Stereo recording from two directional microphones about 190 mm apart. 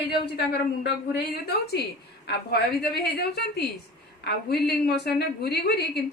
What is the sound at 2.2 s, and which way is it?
Speech, 60° left (ahead or behind).